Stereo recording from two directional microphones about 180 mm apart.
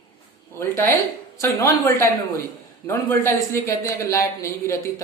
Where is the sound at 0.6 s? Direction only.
15° left (ahead or behind).